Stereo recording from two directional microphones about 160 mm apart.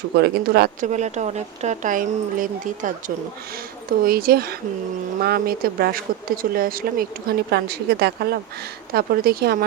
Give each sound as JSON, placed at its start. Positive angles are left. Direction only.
{"t": 0.2, "sound": "speech", "side_deg": -80}
{"t": 0.9, "sound": "speech", "side_deg": -45}
{"t": 4.0, "sound": "speech", "side_deg": -70}
{"t": 8.9, "sound": "speech", "side_deg": -75}